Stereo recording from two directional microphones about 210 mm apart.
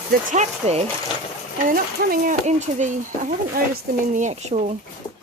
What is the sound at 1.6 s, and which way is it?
Speech, 45° right (ahead or behind).